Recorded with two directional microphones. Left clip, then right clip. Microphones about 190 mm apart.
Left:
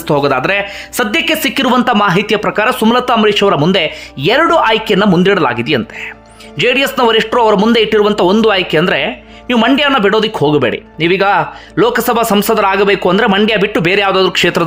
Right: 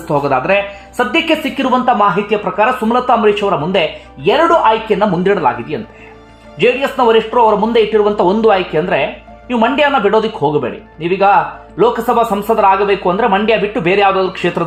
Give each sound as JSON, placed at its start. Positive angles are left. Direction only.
{"t": 0.1, "sound": "a woman's voice", "side_deg": 15}